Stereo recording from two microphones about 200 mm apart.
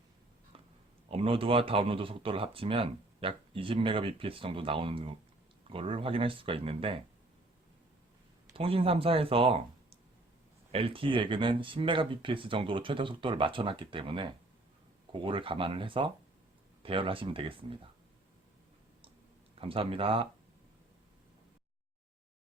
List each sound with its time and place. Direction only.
1.0 s speech: 30° right (ahead or behind)
8.5 s speech: 30° right (ahead or behind)
10.7 s speech: 30° right (ahead or behind)
19.5 s speech: 25° right (ahead or behind)